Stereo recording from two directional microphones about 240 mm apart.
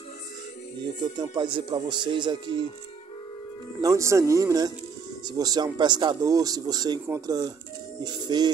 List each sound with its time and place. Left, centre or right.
1.1 s speech: centre
3.8 s speech: centre